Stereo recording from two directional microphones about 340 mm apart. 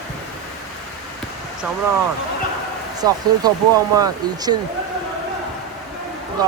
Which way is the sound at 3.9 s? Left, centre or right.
Centre.